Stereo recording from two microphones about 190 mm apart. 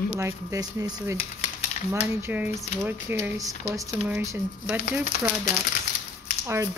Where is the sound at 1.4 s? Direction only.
35° left (ahead or behind).